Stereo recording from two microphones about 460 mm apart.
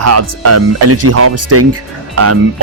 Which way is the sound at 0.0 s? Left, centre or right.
Right.